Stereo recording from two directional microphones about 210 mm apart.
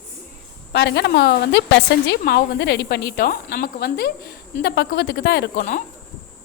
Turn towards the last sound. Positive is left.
turn(degrees=45)  # may be behind; listen again after turning